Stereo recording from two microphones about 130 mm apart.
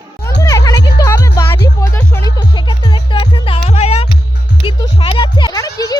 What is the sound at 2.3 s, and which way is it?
Music, 35° left (ahead or behind).